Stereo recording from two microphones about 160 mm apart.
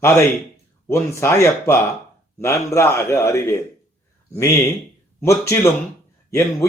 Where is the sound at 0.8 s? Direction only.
15° left (ahead or behind).